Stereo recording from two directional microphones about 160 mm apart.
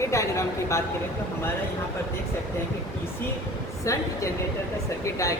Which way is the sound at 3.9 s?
20° left (ahead or behind).